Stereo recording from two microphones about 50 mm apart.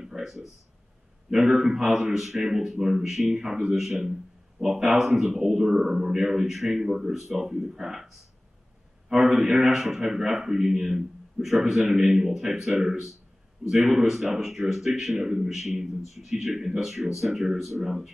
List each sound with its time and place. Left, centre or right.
0.0 s a sound: centre
1.3 s speech: centre
13.7 s speech: centre